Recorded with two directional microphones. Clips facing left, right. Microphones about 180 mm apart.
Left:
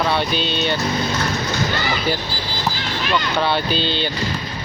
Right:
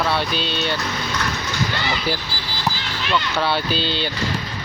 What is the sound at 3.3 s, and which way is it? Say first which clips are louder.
Speech: left 2 dB; 5° right (ahead or behind).